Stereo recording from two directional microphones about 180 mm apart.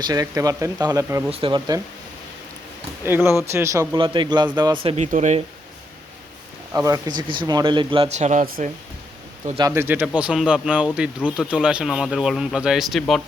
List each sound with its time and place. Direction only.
0.0 s speech: 20° right (ahead or behind)
3.1 s speech: 10° right (ahead or behind); by 5.0 s 30° right (ahead or behind)
5.1 s speech: 40° right (ahead or behind)
6.7 s speech: 20° right (ahead or behind); by 8.7 s 45° right (ahead or behind)
9.6 s speech: 15° right (ahead or behind); by 13.2 s centre (ahead or behind)